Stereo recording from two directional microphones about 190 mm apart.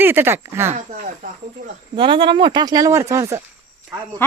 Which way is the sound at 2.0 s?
25° right (ahead or behind).